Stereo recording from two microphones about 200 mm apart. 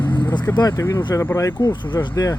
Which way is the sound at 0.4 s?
15° left (ahead or behind).